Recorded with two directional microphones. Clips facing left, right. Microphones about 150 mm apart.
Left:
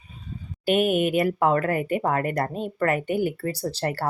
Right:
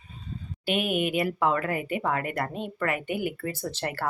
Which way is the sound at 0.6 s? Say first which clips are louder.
Left 6 dB; 45° left (ahead or behind).